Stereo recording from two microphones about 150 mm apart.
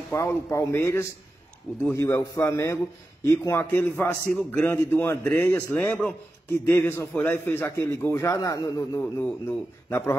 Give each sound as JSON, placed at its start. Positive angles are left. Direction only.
{"t": 0.1, "sound": "a man's voice", "side_deg": 20}